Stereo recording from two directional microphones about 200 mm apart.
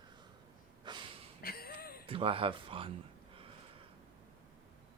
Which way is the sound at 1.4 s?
50° left (ahead or behind).